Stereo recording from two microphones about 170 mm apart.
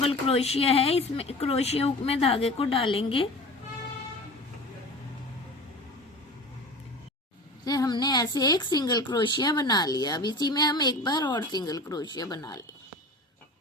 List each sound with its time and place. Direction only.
0.0 s speech: 35° left (ahead or behind)
7.6 s a woman's voice: 25° left (ahead or behind)